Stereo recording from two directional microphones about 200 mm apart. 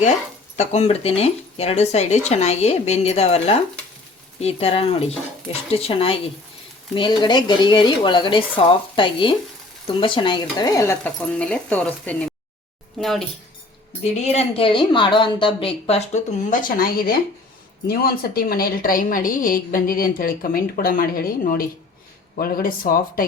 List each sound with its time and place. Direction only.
0.5 s a woman's voice: 35° left (ahead or behind); by 13.2 s centre (ahead or behind)
14.0 s a woman's voice: 30° left (ahead or behind)